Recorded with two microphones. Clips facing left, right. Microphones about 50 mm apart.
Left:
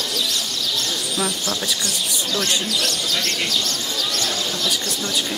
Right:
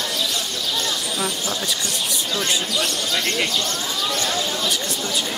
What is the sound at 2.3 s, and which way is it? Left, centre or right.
Speech, right.